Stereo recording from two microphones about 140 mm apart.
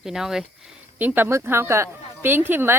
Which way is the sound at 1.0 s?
15° right (ahead or behind).